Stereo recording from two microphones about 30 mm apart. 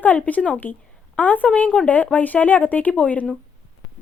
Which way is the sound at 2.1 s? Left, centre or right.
Left.